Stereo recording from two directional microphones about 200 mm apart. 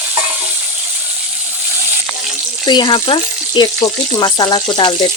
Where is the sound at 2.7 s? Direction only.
25° left (ahead or behind).